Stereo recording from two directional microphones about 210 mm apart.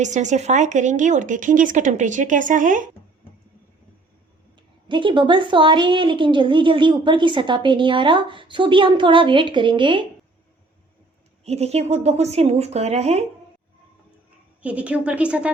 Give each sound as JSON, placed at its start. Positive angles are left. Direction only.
{"t": 0.0, "sound": "speech", "side_deg": -35}
{"t": 4.9, "sound": "a woman's voice", "side_deg": -25}
{"t": 11.4, "sound": "speech", "side_deg": -30}
{"t": 14.6, "sound": "a woman's voice", "side_deg": -5}